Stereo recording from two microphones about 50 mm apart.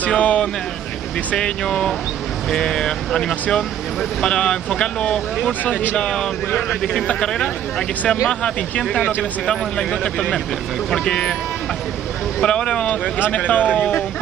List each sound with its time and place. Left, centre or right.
0.1 s speech: left
6.8 s speech: centre
8.3 s speech: centre
12.4 s speech: centre